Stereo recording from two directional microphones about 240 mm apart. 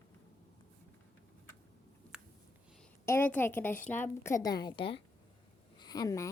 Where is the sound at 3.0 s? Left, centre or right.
Centre.